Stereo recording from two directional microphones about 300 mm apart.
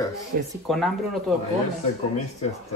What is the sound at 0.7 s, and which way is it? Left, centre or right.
Speech, centre.